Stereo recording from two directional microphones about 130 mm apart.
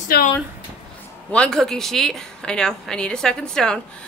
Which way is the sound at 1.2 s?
10° left (ahead or behind).